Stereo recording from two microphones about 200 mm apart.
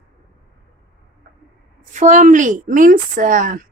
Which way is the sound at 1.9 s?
35° right (ahead or behind).